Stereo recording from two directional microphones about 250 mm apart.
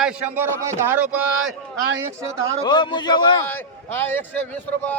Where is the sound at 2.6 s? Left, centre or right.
Centre.